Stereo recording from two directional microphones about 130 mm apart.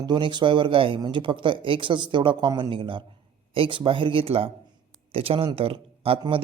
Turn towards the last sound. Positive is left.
turn(degrees=-45)  # may be behind; listen again after turning